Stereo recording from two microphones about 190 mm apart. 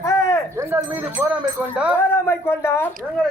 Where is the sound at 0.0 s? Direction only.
15° left (ahead or behind).